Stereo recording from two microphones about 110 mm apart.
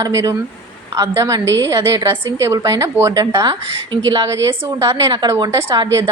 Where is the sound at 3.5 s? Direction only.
50° right (ahead or behind).